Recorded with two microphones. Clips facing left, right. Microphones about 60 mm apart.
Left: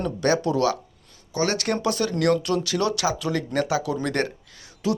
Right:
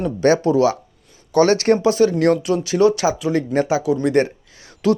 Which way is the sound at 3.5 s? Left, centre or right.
Right.